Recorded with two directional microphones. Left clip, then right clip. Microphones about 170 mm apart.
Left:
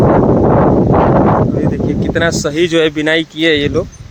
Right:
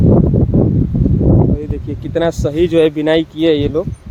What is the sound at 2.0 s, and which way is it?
Speech, 10° right (ahead or behind).